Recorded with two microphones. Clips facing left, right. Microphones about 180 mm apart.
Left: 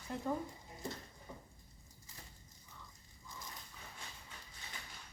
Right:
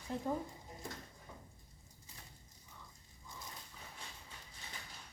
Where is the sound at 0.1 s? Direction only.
20° right (ahead or behind).